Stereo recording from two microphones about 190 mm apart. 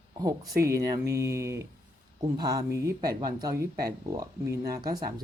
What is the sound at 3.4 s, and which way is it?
Speech, 15° right (ahead or behind).